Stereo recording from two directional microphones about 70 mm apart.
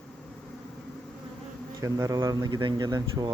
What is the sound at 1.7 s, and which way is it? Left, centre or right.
Speech, right.